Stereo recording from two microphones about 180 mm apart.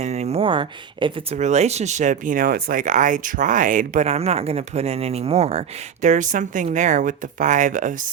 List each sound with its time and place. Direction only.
0.0 s speech: 35° right (ahead or behind)
1.4 s speech: 40° right (ahead or behind)